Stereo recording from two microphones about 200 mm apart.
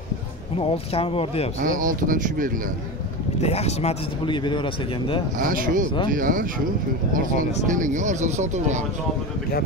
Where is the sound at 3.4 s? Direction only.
30° left (ahead or behind).